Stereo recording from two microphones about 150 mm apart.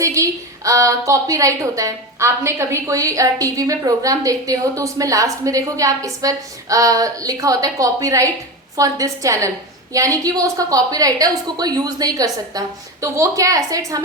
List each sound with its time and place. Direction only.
0.0 s a woman's voice: 20° right (ahead or behind)